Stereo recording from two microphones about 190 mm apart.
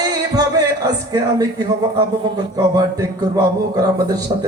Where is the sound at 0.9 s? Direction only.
20° right (ahead or behind).